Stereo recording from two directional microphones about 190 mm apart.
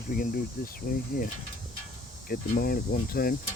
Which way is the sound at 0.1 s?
50° left (ahead or behind).